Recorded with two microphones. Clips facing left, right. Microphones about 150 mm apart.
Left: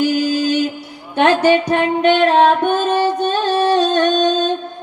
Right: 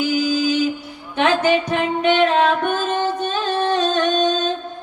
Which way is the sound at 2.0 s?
55° left (ahead or behind).